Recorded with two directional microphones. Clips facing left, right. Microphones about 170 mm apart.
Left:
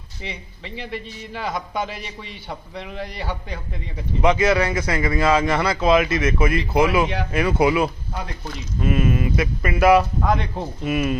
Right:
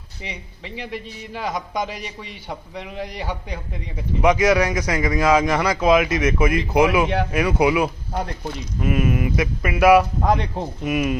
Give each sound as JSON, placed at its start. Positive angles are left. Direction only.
{"t": 0.2, "sound": "a man's voice", "side_deg": -10}
{"t": 10.2, "sound": "speech", "side_deg": -35}
{"t": 10.8, "sound": "a man's voice", "side_deg": -15}